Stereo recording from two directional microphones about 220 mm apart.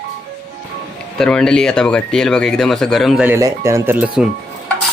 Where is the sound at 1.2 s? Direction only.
5° left (ahead or behind).